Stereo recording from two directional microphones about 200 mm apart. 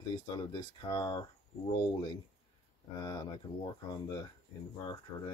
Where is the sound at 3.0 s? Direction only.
20° left (ahead or behind).